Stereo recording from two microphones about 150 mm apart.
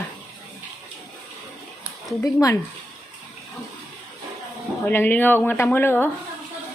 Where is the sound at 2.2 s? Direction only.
20° left (ahead or behind).